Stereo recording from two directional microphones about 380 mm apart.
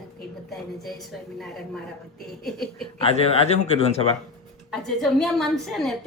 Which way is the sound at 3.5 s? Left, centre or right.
Centre.